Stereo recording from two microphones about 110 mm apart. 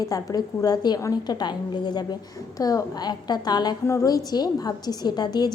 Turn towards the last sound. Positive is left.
turn(degrees=40)  # may be behind; listen again after turning